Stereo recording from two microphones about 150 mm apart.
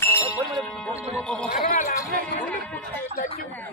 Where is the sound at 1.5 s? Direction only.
65° left (ahead or behind).